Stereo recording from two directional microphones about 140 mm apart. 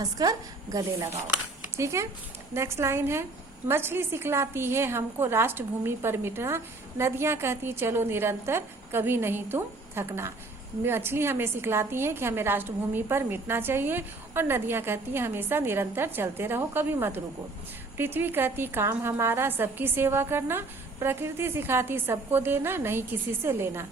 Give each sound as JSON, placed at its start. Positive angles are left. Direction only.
{"t": 0.0, "sound": "a woman's voice", "side_deg": -25}